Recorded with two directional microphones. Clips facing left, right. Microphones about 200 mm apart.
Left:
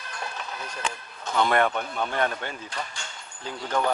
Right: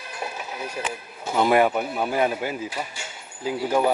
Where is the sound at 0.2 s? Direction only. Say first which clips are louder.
Right 4 dB; 10° right (ahead or behind).